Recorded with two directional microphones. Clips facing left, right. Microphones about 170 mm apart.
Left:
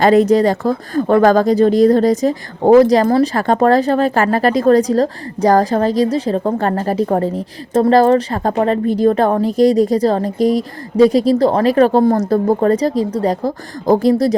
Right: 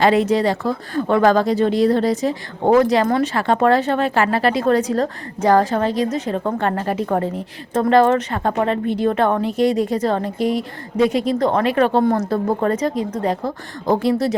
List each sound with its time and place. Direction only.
0.0 s speech: 40° left (ahead or behind)